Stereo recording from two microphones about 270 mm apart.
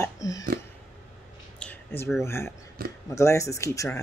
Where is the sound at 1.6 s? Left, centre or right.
Centre.